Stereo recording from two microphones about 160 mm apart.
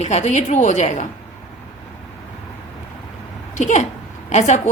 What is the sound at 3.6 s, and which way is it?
A woman's voice, 50° left (ahead or behind).